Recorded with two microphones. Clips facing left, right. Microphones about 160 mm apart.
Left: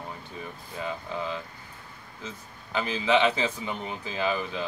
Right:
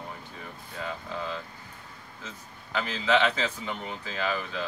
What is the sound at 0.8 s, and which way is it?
Speech, 15° left (ahead or behind).